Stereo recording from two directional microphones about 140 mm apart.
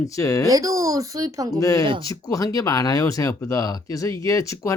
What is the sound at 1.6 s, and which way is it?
Speech, 25° left (ahead or behind).